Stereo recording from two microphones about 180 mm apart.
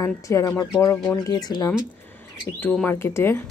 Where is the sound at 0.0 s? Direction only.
15° left (ahead or behind).